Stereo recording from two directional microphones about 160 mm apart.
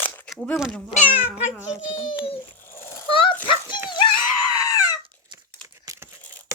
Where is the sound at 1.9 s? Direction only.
35° left (ahead or behind).